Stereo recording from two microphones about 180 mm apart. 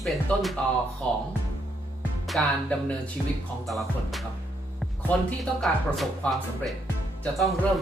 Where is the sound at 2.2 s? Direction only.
Centre (ahead or behind).